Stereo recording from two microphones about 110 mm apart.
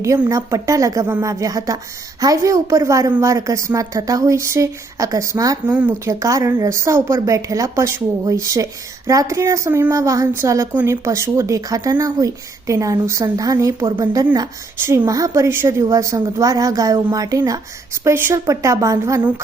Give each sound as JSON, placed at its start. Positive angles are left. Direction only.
{"t": 0.3, "sound": "a woman's voice", "side_deg": -30}